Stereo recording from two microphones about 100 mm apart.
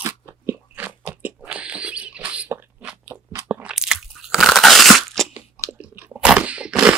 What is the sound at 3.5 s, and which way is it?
Crunch, 10° right (ahead or behind).